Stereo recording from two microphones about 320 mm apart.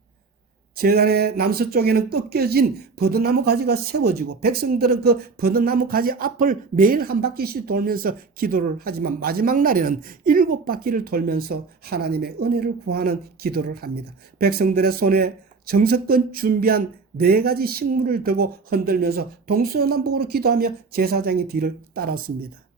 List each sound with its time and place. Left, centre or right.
0.8 s speech: right